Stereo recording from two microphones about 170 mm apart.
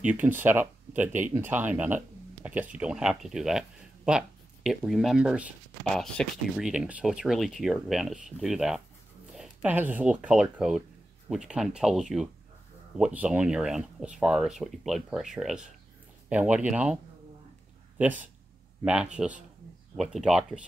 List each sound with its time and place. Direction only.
0.0 s speech: 10° right (ahead or behind)